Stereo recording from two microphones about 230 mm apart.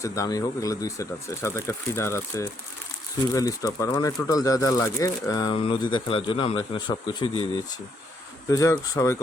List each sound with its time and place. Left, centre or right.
0.0 s speech: centre
8.4 s speech: centre